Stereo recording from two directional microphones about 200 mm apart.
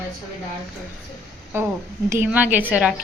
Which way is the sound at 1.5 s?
10° right (ahead or behind).